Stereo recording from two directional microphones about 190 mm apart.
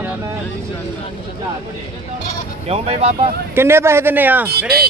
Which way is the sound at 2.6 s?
30° right (ahead or behind).